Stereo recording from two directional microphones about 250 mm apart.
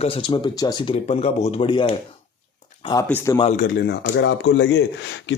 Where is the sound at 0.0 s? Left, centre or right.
Left.